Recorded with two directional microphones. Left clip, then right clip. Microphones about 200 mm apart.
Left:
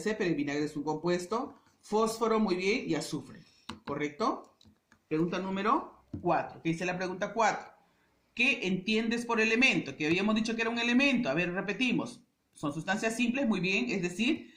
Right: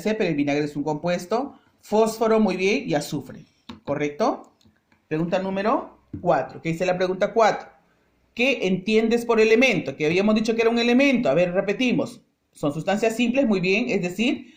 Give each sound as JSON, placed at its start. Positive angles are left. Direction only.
{"t": 0.0, "sound": "speech", "side_deg": -50}
{"t": 8.3, "sound": "speech", "side_deg": -45}